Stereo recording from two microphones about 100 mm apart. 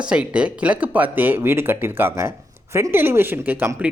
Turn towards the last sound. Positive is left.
turn(degrees=-15)  # may be behind; listen again after turning